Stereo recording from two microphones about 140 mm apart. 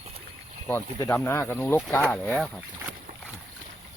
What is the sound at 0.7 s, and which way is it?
Speech, 20° left (ahead or behind).